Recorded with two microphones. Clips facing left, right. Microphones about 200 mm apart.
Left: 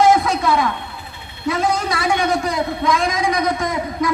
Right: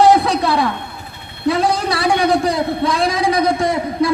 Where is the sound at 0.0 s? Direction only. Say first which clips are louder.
Right 2 dB; 35° right (ahead or behind).